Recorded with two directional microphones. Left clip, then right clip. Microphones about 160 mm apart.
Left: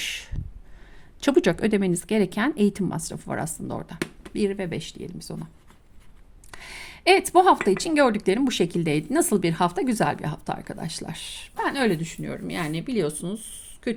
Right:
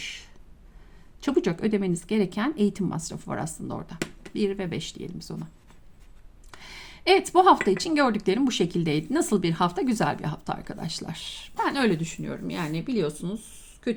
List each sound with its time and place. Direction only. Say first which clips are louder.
0.0 s a sound: left 6 dB; 35° left (ahead or behind)
1.2 s a woman's voice: left 5 dB; 35° left (ahead or behind); by 5.5 s 15° left (ahead or behind)
6.5 s a woman's voice: left 4 dB; 20° left (ahead or behind)